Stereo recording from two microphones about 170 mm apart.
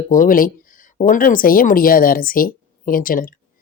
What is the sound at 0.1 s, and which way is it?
Speech, 55° left (ahead or behind).